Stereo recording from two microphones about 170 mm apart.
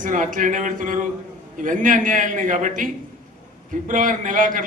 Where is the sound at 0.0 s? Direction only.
50° right (ahead or behind).